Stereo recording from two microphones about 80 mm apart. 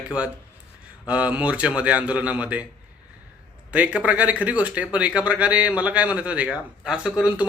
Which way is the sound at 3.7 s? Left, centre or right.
Centre.